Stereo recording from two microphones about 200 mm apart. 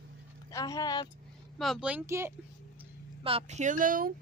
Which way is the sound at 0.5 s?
15° left (ahead or behind).